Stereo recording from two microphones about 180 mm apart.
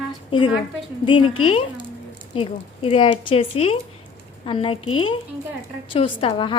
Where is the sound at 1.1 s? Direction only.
30° left (ahead or behind).